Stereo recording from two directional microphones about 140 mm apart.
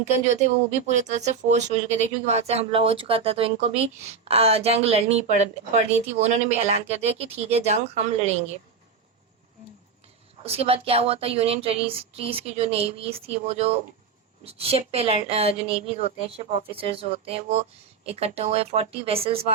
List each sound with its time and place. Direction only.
0.3 s speech: 55° right (ahead or behind)
10.4 s speech: 45° right (ahead or behind)